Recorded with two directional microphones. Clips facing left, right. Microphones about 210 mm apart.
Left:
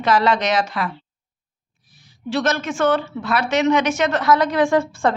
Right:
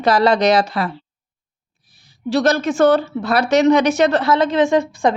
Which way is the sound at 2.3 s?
35° right (ahead or behind).